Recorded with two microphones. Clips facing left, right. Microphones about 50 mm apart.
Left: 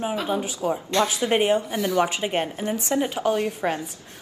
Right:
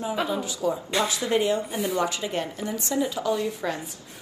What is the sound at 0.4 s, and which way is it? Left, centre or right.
Speech, left.